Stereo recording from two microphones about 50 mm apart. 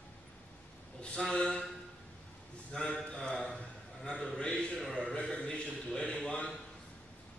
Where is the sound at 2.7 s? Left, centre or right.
Centre.